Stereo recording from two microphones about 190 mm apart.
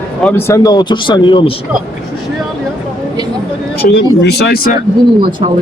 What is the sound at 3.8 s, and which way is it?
Speech, 60° left (ahead or behind).